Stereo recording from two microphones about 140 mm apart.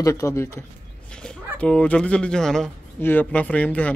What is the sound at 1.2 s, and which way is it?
Speech, 10° left (ahead or behind).